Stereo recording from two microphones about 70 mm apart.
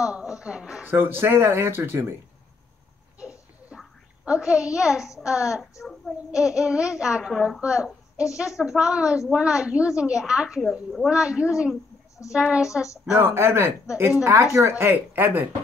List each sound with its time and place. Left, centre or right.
0.0 s speech: centre
0.8 s speech: right
3.2 s babbling: centre
5.2 s a child's voice: centre
10.6 s speech: centre
11.1 s speech: centre
13.1 s speech: right